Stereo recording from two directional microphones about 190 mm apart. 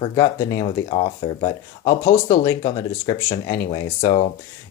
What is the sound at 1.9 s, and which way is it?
Speech, 15° left (ahead or behind).